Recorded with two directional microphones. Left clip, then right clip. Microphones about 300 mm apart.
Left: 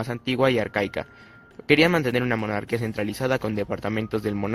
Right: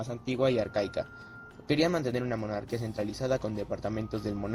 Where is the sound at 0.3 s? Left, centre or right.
Left.